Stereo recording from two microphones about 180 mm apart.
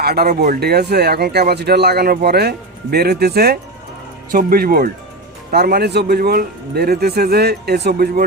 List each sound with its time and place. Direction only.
0.0 s speech: 60° right (ahead or behind)